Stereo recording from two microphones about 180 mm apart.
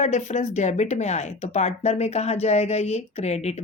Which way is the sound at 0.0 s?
40° left (ahead or behind).